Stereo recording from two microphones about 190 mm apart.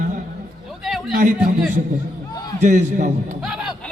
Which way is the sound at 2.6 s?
40° right (ahead or behind).